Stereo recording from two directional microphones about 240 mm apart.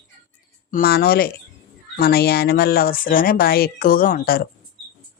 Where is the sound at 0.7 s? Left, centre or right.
Left.